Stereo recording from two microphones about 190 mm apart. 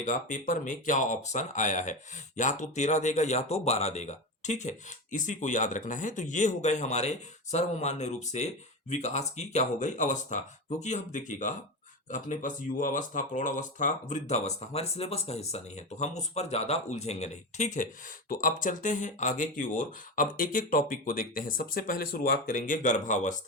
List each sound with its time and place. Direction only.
0.0 s speech: 40° left (ahead or behind)